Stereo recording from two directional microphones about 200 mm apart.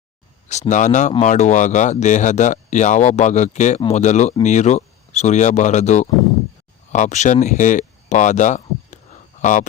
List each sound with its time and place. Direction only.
0.7 s speech: 35° left (ahead or behind)